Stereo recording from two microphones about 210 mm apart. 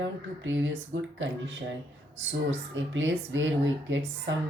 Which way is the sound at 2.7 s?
65° right (ahead or behind).